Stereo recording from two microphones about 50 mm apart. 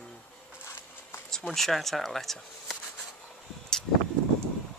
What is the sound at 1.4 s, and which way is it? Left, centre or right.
Speech, centre.